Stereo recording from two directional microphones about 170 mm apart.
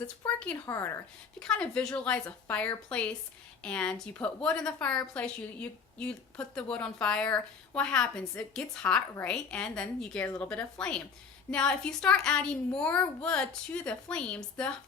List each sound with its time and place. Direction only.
0.5 s a woman's voice: 15° left (ahead or behind)
1.4 s a woman's voice: 5° left (ahead or behind)